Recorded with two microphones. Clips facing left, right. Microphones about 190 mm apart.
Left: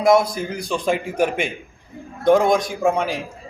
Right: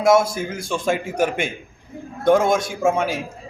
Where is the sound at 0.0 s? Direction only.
Centre (ahead or behind).